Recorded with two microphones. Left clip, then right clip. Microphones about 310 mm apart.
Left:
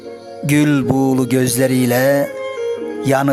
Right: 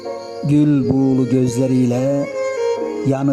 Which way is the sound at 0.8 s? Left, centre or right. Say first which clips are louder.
Left 1 dB; left.